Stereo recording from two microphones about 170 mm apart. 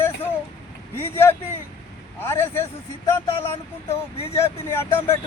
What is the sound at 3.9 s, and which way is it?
Speech, 35° left (ahead or behind).